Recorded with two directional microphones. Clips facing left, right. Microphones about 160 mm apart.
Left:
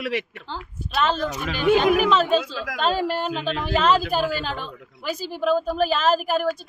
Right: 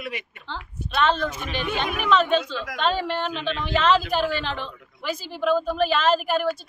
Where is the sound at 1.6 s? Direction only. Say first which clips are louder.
Left 10 dB; 40° left (ahead or behind).